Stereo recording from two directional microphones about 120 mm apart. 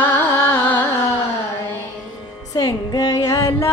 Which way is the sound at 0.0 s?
20° left (ahead or behind).